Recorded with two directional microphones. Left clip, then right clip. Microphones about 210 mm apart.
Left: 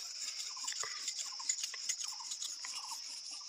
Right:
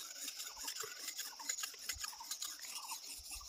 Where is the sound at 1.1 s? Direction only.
15° right (ahead or behind).